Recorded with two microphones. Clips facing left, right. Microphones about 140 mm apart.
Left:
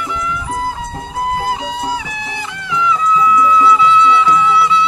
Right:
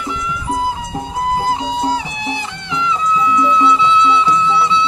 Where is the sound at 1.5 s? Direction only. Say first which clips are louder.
Right 2 dB; 25° right (ahead or behind).